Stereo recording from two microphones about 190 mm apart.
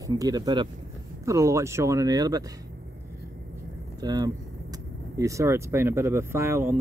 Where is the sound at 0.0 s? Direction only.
20° right (ahead or behind).